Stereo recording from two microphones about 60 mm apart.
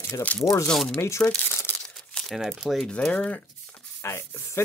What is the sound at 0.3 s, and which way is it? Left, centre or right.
Speech, left.